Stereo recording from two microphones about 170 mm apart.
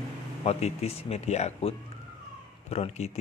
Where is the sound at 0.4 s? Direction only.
40° left (ahead or behind).